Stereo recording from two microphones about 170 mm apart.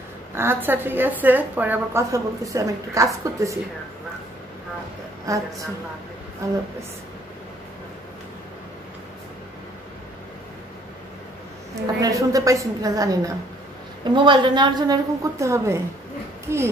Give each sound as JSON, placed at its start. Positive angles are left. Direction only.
{"t": 0.3, "sound": "a woman's voice", "side_deg": -15}
{"t": 5.2, "sound": "a woman's voice", "side_deg": -20}
{"t": 12.0, "sound": "a woman's voice", "side_deg": -20}